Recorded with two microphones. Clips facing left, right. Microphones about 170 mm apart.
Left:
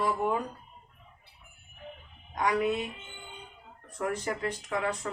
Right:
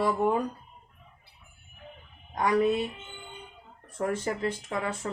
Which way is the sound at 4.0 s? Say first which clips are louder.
Right 3 dB; 30° right (ahead or behind).